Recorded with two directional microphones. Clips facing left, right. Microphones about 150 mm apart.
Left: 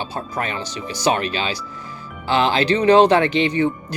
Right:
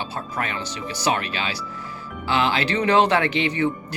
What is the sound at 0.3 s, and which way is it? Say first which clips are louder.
Speech: left 2 dB; 30° left (ahead or behind).